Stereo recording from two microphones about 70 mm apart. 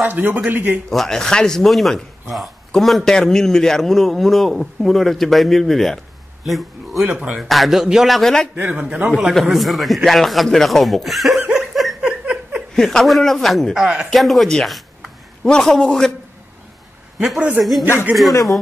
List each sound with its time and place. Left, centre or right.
0.1 s a man's voice: right
0.8 s a man's voice: centre
7.1 s a man's voice: right
7.3 s a man's voice: centre
8.5 s a man's voice: right
9.3 s a man's voice: centre
11.4 s laughter: centre
12.0 s a sound: centre
12.7 s a man's voice: centre
17.6 s a man's voice: centre